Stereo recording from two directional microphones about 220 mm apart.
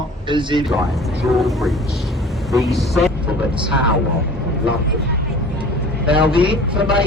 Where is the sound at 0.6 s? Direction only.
Centre (ahead or behind).